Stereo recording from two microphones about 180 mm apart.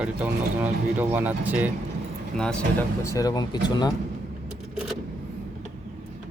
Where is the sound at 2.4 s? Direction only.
5° left (ahead or behind).